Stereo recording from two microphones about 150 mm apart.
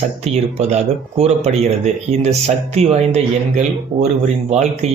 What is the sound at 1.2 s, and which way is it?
Speech, 45° right (ahead or behind).